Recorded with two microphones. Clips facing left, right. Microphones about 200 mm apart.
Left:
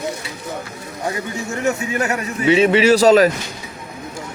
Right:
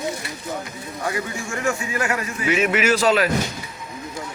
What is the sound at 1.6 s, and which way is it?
A man's voice, 20° left (ahead or behind).